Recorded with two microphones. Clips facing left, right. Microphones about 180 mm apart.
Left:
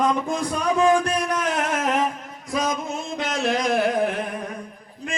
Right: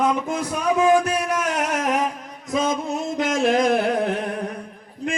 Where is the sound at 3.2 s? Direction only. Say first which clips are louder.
Right 5 dB; 45° right (ahead or behind).